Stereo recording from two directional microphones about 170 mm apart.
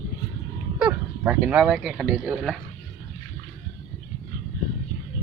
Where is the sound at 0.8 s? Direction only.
10° right (ahead or behind).